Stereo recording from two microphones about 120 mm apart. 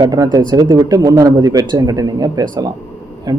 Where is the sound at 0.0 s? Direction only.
35° right (ahead or behind).